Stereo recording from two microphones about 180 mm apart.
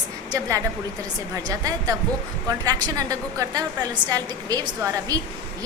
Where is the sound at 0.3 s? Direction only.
20° right (ahead or behind).